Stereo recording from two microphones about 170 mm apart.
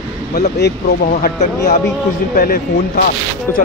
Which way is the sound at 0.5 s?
75° left (ahead or behind).